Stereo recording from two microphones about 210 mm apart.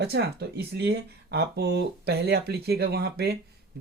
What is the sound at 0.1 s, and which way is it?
Speech, 50° right (ahead or behind).